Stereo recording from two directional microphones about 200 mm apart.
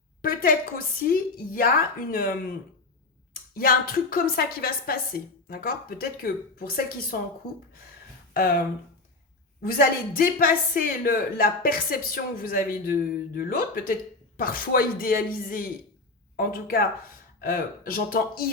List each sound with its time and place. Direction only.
0.2 s a woman's voice: 45° left (ahead or behind)
3.5 s speech: 45° left (ahead or behind)
8.3 s speech: 45° left (ahead or behind)